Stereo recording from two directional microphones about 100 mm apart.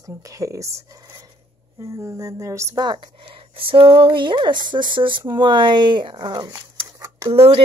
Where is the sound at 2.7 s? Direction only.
45° right (ahead or behind).